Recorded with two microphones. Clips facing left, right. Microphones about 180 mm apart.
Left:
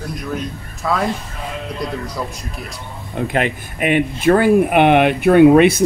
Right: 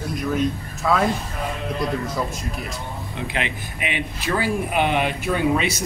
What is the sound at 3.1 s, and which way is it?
Speech, 50° left (ahead or behind).